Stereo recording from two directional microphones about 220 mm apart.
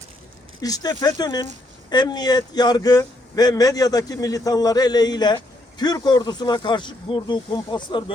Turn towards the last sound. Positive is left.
turn(degrees=20)  # may be behind; listen again after turning